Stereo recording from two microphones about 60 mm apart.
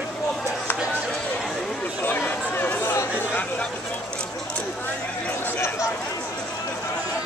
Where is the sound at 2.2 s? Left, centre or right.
Left.